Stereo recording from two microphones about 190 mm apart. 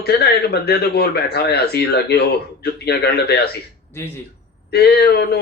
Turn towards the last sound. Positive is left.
turn(degrees=55)  # may be behind; listen again after turning